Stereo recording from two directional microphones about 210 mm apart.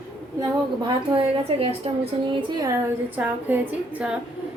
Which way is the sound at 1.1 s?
25° right (ahead or behind).